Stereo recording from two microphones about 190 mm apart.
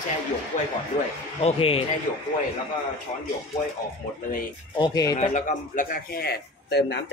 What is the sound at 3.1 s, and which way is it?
Speech, 35° left (ahead or behind).